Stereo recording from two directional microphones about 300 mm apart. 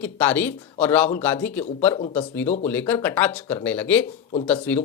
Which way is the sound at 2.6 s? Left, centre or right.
Centre.